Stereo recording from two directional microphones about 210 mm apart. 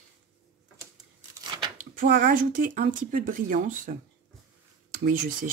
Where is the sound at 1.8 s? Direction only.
40° right (ahead or behind).